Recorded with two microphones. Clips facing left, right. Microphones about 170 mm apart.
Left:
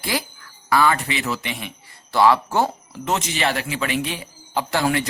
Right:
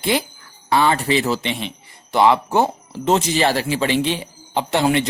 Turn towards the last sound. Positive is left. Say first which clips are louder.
# right 3 dB
turn(degrees=-20)  # may be behind; listen again after turning